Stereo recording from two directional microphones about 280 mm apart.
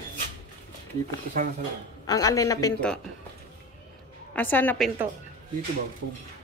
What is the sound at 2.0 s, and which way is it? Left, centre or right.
A man's voice, centre.